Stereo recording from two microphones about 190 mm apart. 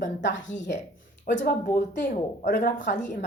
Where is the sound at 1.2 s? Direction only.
55° left (ahead or behind).